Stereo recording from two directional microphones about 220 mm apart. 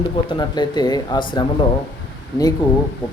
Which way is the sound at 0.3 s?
20° left (ahead or behind).